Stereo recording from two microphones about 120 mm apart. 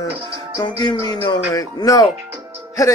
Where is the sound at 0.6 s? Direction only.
35° left (ahead or behind).